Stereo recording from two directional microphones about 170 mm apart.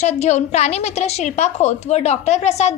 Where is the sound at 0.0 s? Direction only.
40° left (ahead or behind).